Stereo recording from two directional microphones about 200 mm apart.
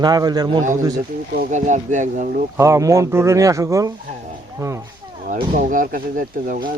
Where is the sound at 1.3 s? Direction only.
40° right (ahead or behind).